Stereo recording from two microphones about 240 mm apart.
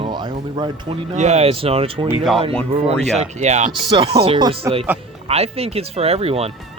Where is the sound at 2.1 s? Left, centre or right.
Centre.